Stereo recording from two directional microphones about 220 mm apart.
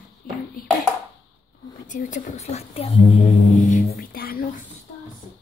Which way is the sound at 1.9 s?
35° left (ahead or behind).